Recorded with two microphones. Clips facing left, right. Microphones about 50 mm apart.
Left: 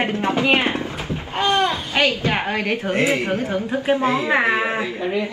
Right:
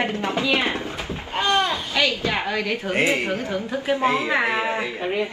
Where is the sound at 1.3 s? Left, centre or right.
Centre.